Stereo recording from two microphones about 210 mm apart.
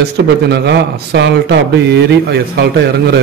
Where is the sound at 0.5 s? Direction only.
50° right (ahead or behind).